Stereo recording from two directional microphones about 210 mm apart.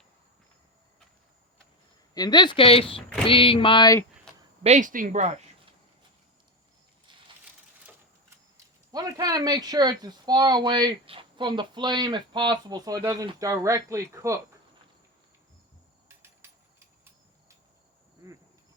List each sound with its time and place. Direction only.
2.1 s speech: 20° left (ahead or behind)
4.3 s a sound: 5° left (ahead or behind)
4.6 s speech: 35° right (ahead or behind)
7.1 s a sound: 25° right (ahead or behind)
8.5 s speech: 20° right (ahead or behind)
16.0 s insect: 10° right (ahead or behind)